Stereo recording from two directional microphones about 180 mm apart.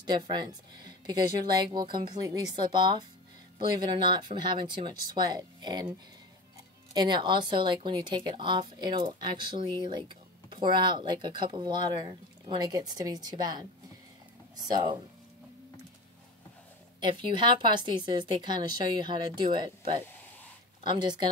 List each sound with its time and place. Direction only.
0.0 s speech: 25° right (ahead or behind)
6.9 s speech: 25° right (ahead or behind)
17.0 s speech: 25° right (ahead or behind)